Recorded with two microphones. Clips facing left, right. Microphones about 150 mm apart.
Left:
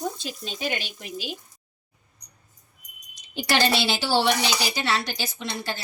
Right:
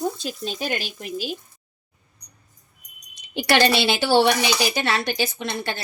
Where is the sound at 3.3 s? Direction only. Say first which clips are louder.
Right 4 dB; 65° right (ahead or behind).